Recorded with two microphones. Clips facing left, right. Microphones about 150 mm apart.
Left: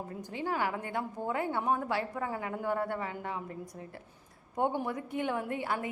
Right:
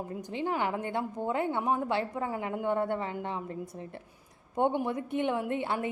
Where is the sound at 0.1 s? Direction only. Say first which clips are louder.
Right 2 dB; 20° right (ahead or behind).